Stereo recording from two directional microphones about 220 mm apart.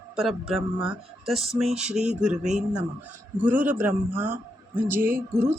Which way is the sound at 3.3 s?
10° right (ahead or behind).